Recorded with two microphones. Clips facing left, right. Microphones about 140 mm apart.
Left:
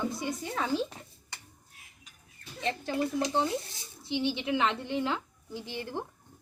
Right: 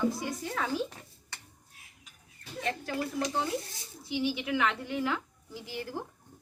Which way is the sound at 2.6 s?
20° left (ahead or behind).